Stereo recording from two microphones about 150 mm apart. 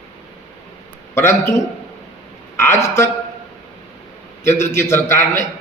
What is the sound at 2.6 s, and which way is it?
Speech, 20° left (ahead or behind).